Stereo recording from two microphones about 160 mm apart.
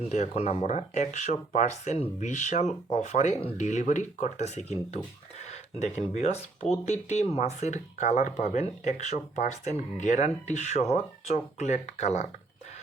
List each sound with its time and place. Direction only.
0.1 s speech: 45° left (ahead or behind)